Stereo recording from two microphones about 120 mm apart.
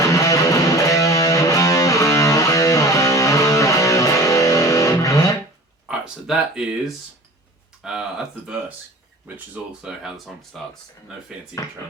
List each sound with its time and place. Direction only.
0.0 s music: 25° left (ahead or behind)
5.9 s speech: 5° right (ahead or behind)
7.8 s speech: 5° right (ahead or behind)
9.8 s speech: 5° right (ahead or behind)